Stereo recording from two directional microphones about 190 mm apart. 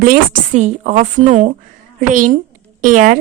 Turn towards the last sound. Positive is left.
turn(degrees=-45)  # may be behind; listen again after turning